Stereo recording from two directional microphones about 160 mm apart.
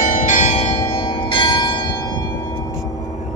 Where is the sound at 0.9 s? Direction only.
35° left (ahead or behind).